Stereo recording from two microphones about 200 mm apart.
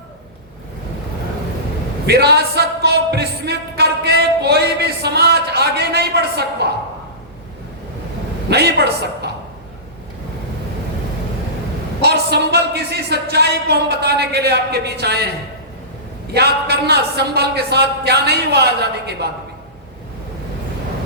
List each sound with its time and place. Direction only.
2.0 s music: 55° right (ahead or behind)
8.4 s a man's voice: 55° right (ahead or behind)
12.0 s speech: 55° right (ahead or behind)
16.3 s speech: 55° right (ahead or behind)